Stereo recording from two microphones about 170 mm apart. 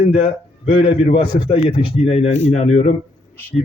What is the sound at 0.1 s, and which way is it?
A man's voice, 40° left (ahead or behind).